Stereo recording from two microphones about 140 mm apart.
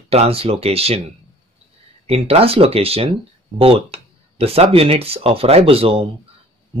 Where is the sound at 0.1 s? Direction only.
45° right (ahead or behind).